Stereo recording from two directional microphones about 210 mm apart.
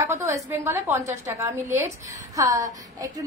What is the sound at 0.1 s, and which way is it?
A woman's voice, 10° right (ahead or behind).